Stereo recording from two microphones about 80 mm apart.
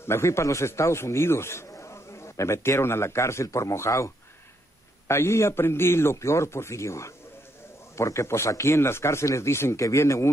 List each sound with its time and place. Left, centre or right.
0.0 s a man's voice: left